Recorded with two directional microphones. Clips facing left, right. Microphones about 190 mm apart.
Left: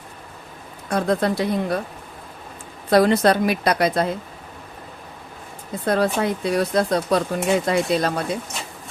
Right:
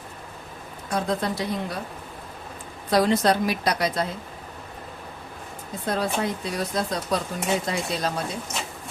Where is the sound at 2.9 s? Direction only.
60° left (ahead or behind).